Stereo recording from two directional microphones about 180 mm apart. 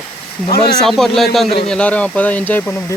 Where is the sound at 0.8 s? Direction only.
Centre (ahead or behind).